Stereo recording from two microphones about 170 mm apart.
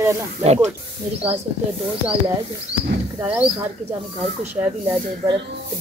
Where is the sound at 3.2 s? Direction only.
10° right (ahead or behind).